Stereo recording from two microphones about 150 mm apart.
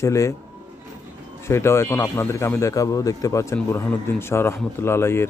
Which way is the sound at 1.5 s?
20° left (ahead or behind).